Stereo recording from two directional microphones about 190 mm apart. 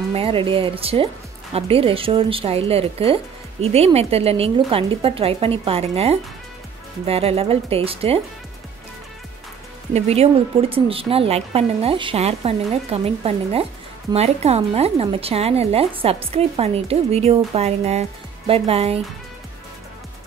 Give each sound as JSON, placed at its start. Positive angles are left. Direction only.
{"t": 0.1, "sound": "speech", "side_deg": -30}
{"t": 9.9, "sound": "speech", "side_deg": -35}